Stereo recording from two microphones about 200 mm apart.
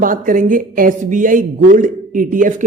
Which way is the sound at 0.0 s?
45° right (ahead or behind).